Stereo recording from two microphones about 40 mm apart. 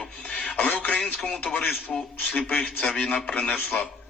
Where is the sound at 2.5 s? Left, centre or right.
Left.